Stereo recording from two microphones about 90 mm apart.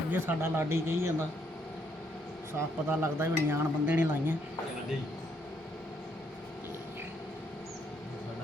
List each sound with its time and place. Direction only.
0.1 s speech: 25° right (ahead or behind)
2.5 s speech: 25° right (ahead or behind)